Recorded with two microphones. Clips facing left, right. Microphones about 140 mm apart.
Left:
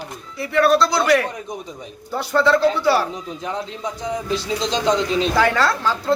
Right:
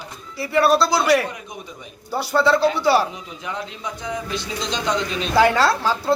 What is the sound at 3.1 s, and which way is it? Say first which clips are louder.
Speech: left 4 dB; 35° left (ahead or behind).